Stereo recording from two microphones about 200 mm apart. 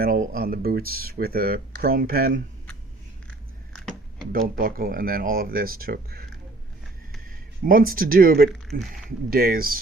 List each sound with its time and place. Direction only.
0.0 s speech: 45° right (ahead or behind)
4.3 s speech: 45° right (ahead or behind)
7.3 s speech: 45° right (ahead or behind)
8.7 s speech: centre (ahead or behind)
9.0 s speech: 50° right (ahead or behind)